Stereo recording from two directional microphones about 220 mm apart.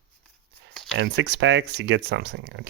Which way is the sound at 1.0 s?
50° right (ahead or behind).